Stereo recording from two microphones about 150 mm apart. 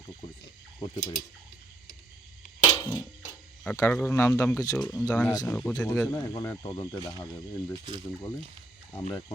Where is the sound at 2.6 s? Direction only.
25° left (ahead or behind).